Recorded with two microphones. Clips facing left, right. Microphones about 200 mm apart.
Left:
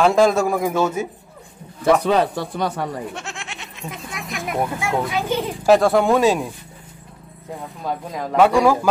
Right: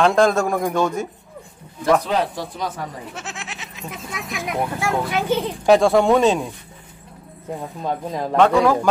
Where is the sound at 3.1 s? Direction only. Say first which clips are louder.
Left 1 dB; centre (ahead or behind).